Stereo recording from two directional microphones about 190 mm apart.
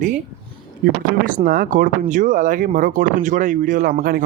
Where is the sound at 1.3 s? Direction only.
50° right (ahead or behind).